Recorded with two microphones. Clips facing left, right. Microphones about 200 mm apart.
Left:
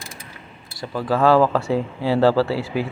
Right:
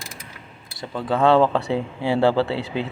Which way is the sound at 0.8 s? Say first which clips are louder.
Left 1 dB; 25° right (ahead or behind).